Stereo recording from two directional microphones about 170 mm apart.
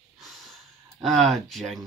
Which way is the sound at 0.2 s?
Centre (ahead or behind).